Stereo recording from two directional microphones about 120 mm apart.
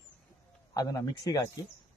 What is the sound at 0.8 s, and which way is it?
Speech, 35° left (ahead or behind).